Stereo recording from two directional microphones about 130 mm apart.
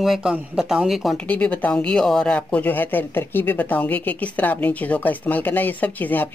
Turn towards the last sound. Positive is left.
turn(degrees=15)  # may be behind; listen again after turning